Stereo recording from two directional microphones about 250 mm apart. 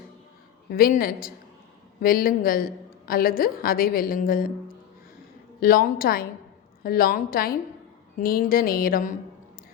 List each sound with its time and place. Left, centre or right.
0.7 s a woman's voice: left
5.5 s a woman's voice: left